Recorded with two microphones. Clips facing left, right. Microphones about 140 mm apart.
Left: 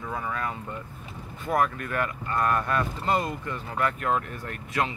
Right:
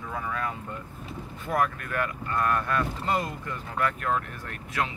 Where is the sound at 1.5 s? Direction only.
5° left (ahead or behind).